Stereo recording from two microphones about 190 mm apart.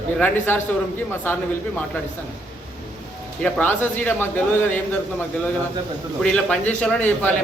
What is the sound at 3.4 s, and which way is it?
A man's voice, 10° left (ahead or behind).